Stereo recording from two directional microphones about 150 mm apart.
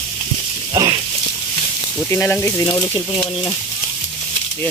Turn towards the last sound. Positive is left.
turn(degrees=20)  # may be behind; listen again after turning